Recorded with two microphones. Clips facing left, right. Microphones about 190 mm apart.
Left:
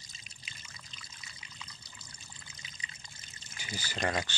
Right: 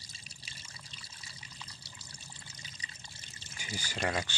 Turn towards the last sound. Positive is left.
turn(degrees=-5)  # may be behind; listen again after turning